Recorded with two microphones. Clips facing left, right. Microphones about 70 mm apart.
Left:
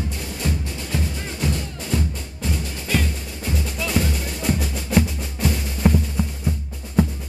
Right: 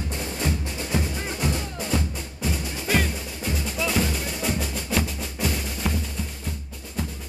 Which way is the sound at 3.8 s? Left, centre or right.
Centre.